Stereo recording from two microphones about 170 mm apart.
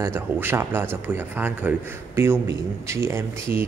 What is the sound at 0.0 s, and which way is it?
A man's voice, 15° right (ahead or behind).